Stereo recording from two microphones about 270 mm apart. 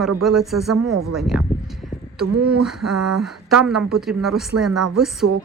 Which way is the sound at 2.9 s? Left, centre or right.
Right.